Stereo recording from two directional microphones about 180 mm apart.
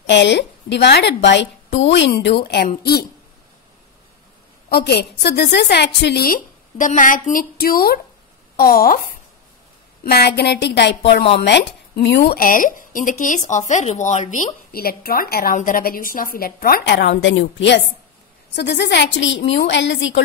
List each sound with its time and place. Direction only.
0.1 s a woman's voice: 75° left (ahead or behind)
4.6 s a woman's voice: 65° left (ahead or behind)
10.0 s a woman's voice: 60° left (ahead or behind); by 17.8 s 85° left
18.5 s a woman's voice: 70° left (ahead or behind); by 20.2 s 90° left